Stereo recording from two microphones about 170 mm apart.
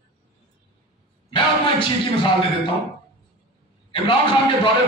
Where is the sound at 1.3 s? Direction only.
30° left (ahead or behind).